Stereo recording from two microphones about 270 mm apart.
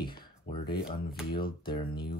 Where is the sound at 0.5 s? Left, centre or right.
Centre.